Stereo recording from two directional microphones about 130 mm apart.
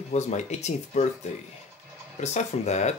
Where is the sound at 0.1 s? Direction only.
60° left (ahead or behind).